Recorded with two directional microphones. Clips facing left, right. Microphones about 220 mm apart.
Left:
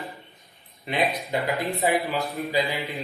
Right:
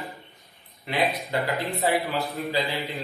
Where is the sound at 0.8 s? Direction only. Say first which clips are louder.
Even; 20° left (ahead or behind).